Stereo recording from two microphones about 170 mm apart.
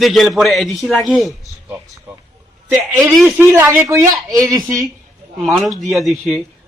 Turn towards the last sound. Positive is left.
turn(degrees=-5)  # may be behind; listen again after turning